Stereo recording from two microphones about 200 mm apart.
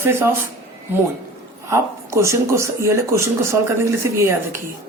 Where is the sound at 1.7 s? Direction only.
15° right (ahead or behind).